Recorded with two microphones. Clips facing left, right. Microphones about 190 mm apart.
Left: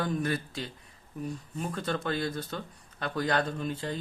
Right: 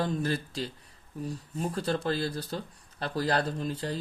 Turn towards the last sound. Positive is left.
turn(degrees=-35)  # may be behind; listen again after turning